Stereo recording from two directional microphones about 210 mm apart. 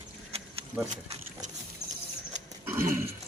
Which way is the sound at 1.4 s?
35° right (ahead or behind).